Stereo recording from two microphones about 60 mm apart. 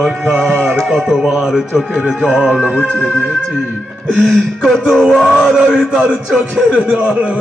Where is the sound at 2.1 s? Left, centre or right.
Centre.